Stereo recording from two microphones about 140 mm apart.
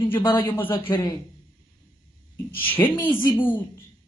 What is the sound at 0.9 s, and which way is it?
Speech, 25° left (ahead or behind).